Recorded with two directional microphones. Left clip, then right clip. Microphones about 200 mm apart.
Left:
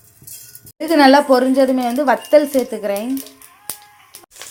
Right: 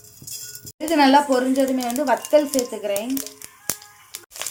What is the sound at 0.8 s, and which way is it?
Speech, 25° left (ahead or behind).